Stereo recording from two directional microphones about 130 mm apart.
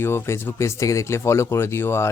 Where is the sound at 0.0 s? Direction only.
20° left (ahead or behind).